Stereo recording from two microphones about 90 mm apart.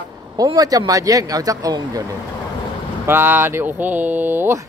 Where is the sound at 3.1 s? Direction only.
25° right (ahead or behind).